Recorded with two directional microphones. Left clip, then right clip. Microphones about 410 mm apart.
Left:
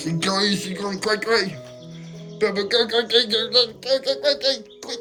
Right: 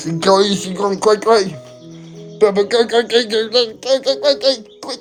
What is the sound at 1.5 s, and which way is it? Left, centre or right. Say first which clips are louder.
Music: right 4 dB; centre.